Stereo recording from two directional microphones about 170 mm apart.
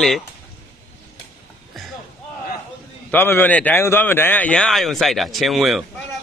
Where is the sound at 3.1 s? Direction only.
10° left (ahead or behind).